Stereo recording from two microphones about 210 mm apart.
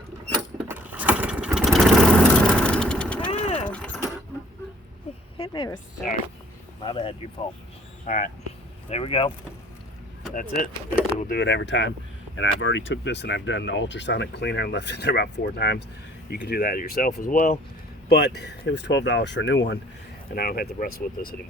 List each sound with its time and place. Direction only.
0.7 s vehicle: 5° right (ahead or behind)
3.4 s vehicle: 30° left (ahead or behind)
3.7 s vehicle: 5° left (ahead or behind)
5.4 s a sound: 20° left (ahead or behind)
6.8 s speech: 25° left (ahead or behind)
8.0 s speech: 35° left (ahead or behind)
10.3 s speech: 40° left (ahead or behind)
11.3 s speech: 55° left (ahead or behind)
20.3 s speech: 45° left (ahead or behind)